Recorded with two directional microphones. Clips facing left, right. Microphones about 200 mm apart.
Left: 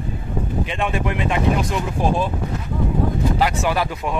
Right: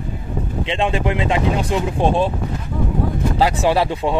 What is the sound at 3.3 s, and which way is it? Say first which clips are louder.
Speech: right 4 dB; 30° right (ahead or behind).